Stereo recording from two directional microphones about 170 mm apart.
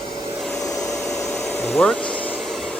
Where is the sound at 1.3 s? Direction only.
Centre (ahead or behind).